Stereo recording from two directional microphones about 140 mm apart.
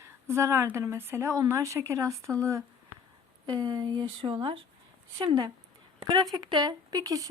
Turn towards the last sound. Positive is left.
turn(degrees=-25)  # may be behind; listen again after turning